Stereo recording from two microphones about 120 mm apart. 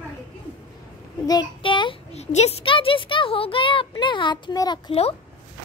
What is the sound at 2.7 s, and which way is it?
A child's voice, 50° left (ahead or behind).